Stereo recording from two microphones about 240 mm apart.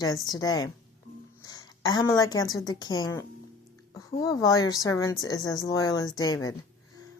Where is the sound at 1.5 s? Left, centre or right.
Centre.